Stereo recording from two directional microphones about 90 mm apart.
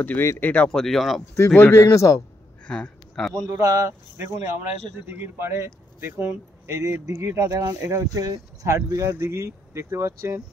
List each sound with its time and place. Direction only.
0.0 s speech: 20° left (ahead or behind)
0.7 s speech: 5° left (ahead or behind)
1.3 s speech: 25° left (ahead or behind)
2.6 s a sound: 10° left (ahead or behind)
3.6 s speech: 40° right (ahead or behind)
5.0 s speech: 25° right (ahead or behind)